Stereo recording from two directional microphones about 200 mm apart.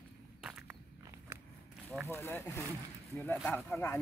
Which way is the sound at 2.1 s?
10° left (ahead or behind).